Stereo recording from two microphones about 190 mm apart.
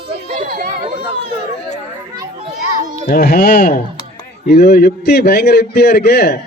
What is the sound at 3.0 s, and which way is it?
A man's voice, 50° left (ahead or behind).